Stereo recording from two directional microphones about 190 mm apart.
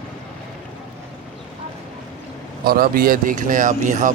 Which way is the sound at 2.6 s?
50° right (ahead or behind).